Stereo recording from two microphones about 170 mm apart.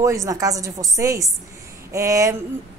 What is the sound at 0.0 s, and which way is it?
Speech, 20° right (ahead or behind).